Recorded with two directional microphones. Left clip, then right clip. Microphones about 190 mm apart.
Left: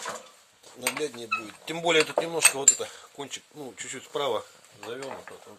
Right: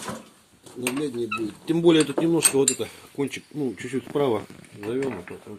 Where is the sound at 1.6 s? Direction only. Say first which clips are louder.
Right 5 dB; 30° left (ahead or behind).